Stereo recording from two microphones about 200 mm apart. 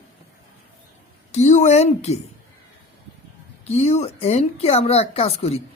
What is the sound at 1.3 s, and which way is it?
Speech, 35° left (ahead or behind).